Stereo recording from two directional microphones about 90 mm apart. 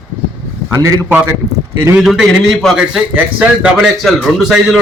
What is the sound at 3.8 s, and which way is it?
A man's voice, centre (ahead or behind).